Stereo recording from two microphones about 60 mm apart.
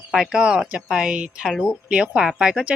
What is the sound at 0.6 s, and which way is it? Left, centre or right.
Speech, right.